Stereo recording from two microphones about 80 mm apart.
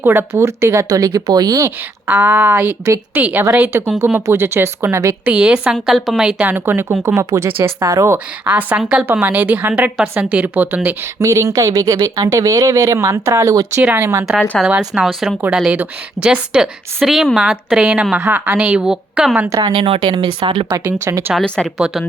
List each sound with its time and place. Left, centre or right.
0.0 s speech: right
2.0 s a woman's voice: centre
5.2 s a woman's voice: centre
6.5 s a woman's voice: right
8.4 s a woman's voice: right
11.2 s speech: right
14.3 s a woman's voice: centre
14.8 s a woman's voice: centre
18.2 s a woman's voice: right
18.5 s a woman's voice: centre
19.6 s speech: right
20.8 s speech: right
21.4 s speech: centre
21.8 s a woman's voice: centre